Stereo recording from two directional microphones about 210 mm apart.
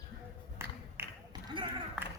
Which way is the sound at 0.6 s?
10° right (ahead or behind).